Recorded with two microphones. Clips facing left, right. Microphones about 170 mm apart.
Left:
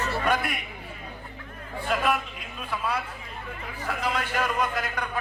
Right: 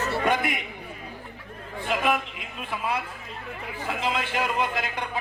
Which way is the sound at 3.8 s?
25° right (ahead or behind).